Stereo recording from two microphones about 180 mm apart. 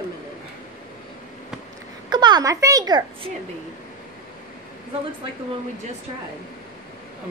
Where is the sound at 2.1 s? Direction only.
25° right (ahead or behind).